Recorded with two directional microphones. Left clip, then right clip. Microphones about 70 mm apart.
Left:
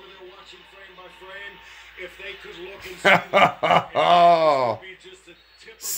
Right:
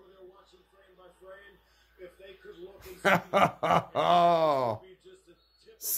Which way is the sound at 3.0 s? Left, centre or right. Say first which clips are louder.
Left 8 dB; right.